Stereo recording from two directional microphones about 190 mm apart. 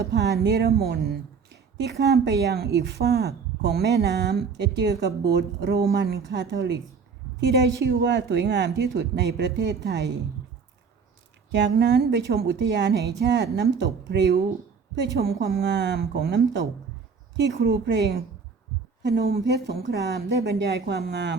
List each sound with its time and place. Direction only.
0.0 s speech: 60° right (ahead or behind)
11.5 s a woman's voice: 65° right (ahead or behind)